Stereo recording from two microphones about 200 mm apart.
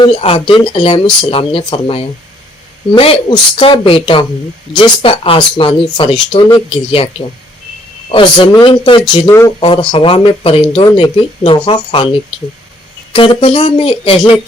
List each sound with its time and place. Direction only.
0.0 s speech: 30° left (ahead or behind)
8.1 s speech: 25° left (ahead or behind)
13.4 s speech: 25° left (ahead or behind)